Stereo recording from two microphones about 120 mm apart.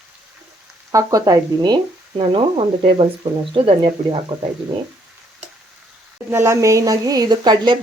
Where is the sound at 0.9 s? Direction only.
25° right (ahead or behind).